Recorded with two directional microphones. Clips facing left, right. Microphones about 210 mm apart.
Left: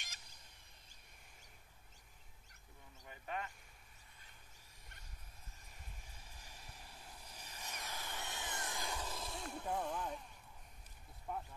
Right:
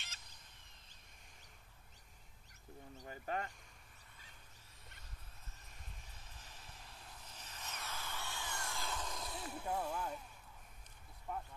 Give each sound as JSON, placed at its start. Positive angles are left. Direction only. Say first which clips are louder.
{"t": 3.0, "sound": "a sound", "louder": "right 3 dB", "side_deg": -40}
{"t": 6.1, "sound": "vehicle", "louder": "even", "side_deg": 10}
{"t": 11.3, "sound": "speech", "louder": "even", "side_deg": 0}